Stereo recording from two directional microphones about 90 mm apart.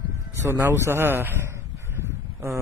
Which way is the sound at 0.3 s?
25° right (ahead or behind).